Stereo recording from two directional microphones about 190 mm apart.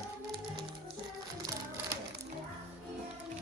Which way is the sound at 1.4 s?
20° right (ahead or behind).